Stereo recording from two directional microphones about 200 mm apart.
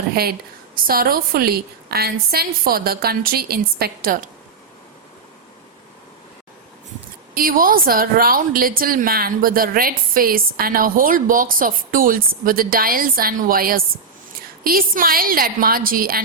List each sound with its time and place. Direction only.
0.1 s a woman's voice: 50° right (ahead or behind)
7.3 s a woman's voice: 45° right (ahead or behind)